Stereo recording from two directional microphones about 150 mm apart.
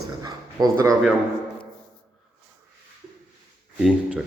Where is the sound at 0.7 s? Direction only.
20° right (ahead or behind).